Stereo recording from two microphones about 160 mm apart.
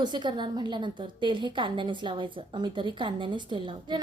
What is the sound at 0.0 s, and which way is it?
A woman's voice, 30° right (ahead or behind).